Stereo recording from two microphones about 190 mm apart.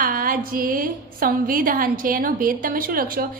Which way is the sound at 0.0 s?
45° right (ahead or behind).